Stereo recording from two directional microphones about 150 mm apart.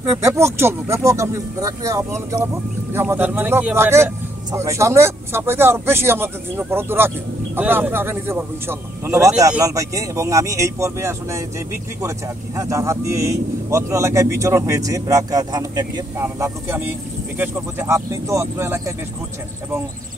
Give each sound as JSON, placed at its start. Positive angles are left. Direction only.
{"t": 0.2, "sound": "speech", "side_deg": -15}